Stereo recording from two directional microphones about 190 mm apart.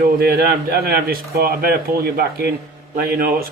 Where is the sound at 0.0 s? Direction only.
55° right (ahead or behind).